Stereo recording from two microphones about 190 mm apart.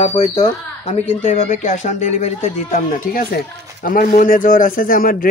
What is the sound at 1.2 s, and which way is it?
A man's voice, 40° left (ahead or behind).